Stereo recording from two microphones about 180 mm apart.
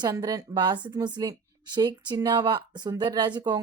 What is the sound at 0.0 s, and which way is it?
A woman's voice, 20° right (ahead or behind).